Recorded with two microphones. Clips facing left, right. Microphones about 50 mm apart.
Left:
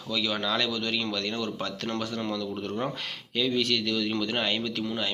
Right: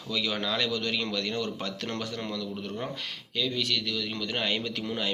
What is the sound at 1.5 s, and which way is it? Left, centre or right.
Speech, centre.